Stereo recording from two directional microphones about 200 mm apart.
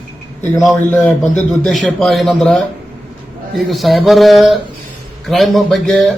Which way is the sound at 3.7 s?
Centre (ahead or behind).